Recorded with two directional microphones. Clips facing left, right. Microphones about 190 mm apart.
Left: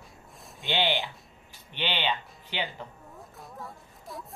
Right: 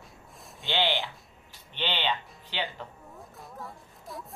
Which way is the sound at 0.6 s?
20° left (ahead or behind).